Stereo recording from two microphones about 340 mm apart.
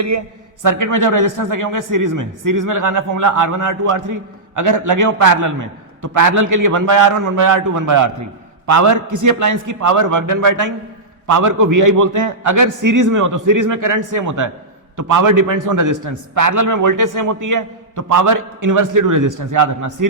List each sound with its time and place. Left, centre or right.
0.6 s a man's voice: right